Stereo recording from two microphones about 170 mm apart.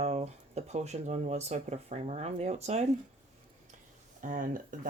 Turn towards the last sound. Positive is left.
turn(degrees=-50)  # may be behind; listen again after turning